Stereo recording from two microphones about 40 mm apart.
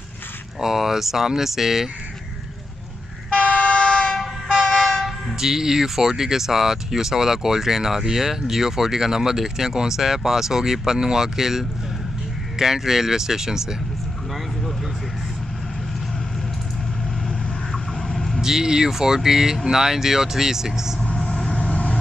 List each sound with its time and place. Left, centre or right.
0.6 s speech: centre
3.3 s vehicle: left
4.6 s train: centre
5.0 s speech: centre
17.9 s vehicle: centre
18.4 s speech: centre
21.5 s vehicle: left